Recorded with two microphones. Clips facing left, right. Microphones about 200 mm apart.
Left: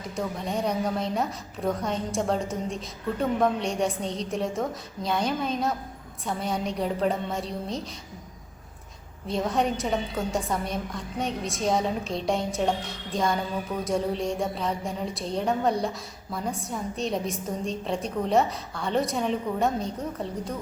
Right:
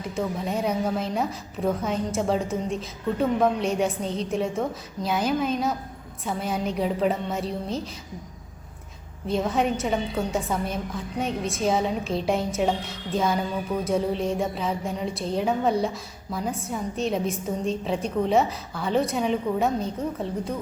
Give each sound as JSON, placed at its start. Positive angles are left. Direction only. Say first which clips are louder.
{"t": 0.2, "sound": "a woman's voice", "louder": "right 2 dB", "side_deg": 0}
{"t": 9.2, "sound": "a woman's voice", "louder": "right 2 dB", "side_deg": 0}